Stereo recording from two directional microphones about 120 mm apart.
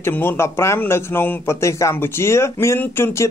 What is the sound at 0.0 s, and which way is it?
A man's voice, 20° left (ahead or behind).